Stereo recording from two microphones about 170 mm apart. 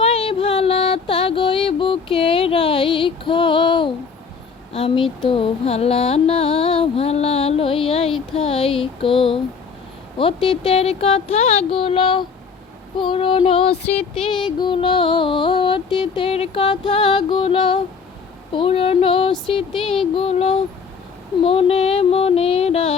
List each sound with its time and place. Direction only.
0.0 s music: 35° left (ahead or behind)
4.7 s speech: 35° left (ahead or behind)
5.3 s music: 35° left (ahead or behind)
8.4 s a sound: 35° left (ahead or behind)
10.2 s female singing: 30° left (ahead or behind)